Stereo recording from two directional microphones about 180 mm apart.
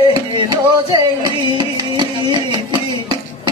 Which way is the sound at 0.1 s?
25° right (ahead or behind).